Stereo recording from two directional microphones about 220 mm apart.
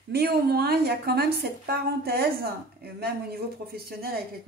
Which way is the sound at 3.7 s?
45° right (ahead or behind).